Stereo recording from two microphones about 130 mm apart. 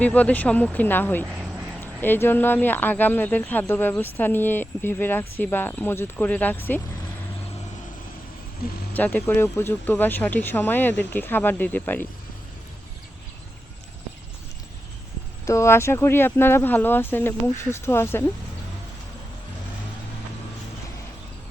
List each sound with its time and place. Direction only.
0.0 s a woman's voice: 10° left (ahead or behind)
8.9 s a woman's voice: 10° left (ahead or behind)
15.4 s a woman's voice: 20° left (ahead or behind)